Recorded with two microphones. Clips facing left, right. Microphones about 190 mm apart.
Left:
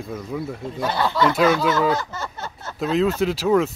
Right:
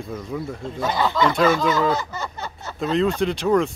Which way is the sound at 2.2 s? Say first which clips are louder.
Right 1 dB; 15° right (ahead or behind).